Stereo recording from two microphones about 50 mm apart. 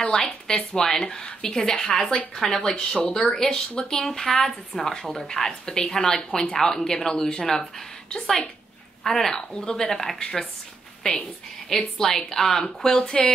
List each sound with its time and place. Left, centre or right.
0.0 s speech: centre
2.7 s speech: centre